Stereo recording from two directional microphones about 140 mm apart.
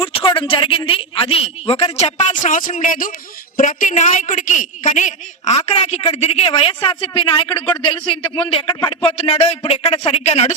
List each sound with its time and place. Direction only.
0.0 s a woman's voice: 40° left (ahead or behind)